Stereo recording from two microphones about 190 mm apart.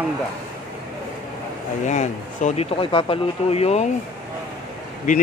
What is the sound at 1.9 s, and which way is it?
Speech, 40° left (ahead or behind).